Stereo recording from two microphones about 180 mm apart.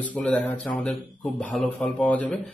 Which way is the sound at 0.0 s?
10° left (ahead or behind).